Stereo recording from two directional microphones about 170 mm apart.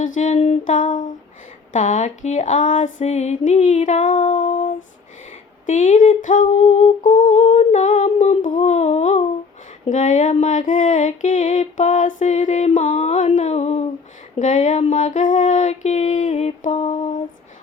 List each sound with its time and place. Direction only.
0.0 s music: 45° left (ahead or behind)